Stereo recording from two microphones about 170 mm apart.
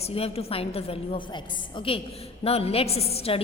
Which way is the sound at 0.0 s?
35° left (ahead or behind).